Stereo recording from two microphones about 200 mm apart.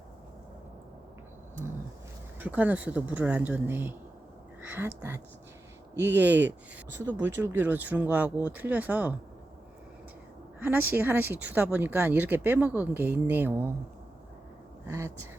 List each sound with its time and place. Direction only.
2.4 s speech: 10° right (ahead or behind)
5.9 s speech: 60° right (ahead or behind)
6.1 s speech: 10° right (ahead or behind)
10.6 s speech: 10° right (ahead or behind)
14.8 s speech: 15° right (ahead or behind)